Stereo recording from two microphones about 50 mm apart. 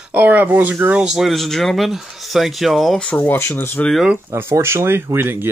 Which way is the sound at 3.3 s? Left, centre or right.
Left.